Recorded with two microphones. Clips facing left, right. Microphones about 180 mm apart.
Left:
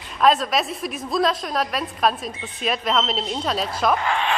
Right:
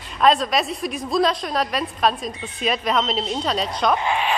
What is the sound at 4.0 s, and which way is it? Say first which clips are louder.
Speech: right 1 dB; 15° right (ahead or behind).